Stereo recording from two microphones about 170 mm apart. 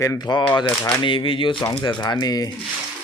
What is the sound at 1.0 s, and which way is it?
Speech, 30° left (ahead or behind).